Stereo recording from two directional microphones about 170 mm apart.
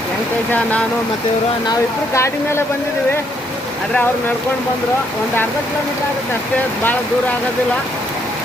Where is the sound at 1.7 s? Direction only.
15° left (ahead or behind).